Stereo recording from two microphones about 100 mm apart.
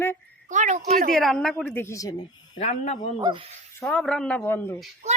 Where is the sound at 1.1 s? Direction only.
5° left (ahead or behind).